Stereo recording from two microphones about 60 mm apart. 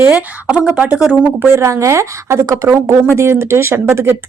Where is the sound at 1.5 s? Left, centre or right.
Right.